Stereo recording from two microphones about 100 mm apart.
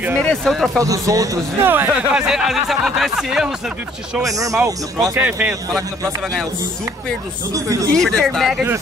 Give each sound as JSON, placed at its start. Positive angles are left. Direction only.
{"t": 0.2, "sound": "speech", "side_deg": 5}
{"t": 0.8, "sound": "a man's voice", "side_deg": -35}
{"t": 1.6, "sound": "speech", "side_deg": -20}
{"t": 2.1, "sound": "speech", "side_deg": -5}
{"t": 4.2, "sound": "a man's voice", "side_deg": -35}
{"t": 5.1, "sound": "a man's voice", "side_deg": -15}
{"t": 7.5, "sound": "a man's voice", "side_deg": -35}
{"t": 8.0, "sound": "speech", "side_deg": 5}